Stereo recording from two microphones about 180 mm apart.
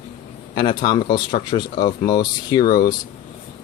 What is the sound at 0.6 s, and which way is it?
Speech, 25° left (ahead or behind).